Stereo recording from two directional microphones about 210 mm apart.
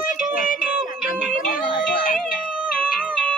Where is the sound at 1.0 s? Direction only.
40° left (ahead or behind).